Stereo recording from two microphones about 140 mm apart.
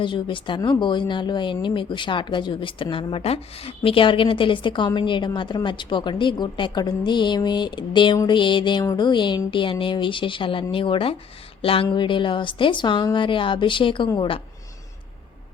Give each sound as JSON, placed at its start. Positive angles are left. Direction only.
{"t": 0.0, "sound": "speech", "side_deg": 35}